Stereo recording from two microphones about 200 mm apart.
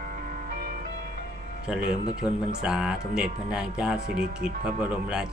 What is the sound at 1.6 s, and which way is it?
Speech, 5° right (ahead or behind).